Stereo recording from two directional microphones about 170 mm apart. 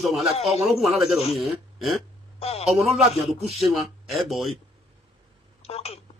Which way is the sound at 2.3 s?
35° left (ahead or behind).